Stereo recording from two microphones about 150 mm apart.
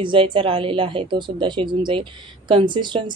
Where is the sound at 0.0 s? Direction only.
35° right (ahead or behind).